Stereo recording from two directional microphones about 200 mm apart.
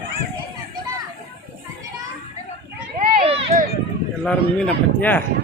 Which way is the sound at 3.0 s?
30° right (ahead or behind).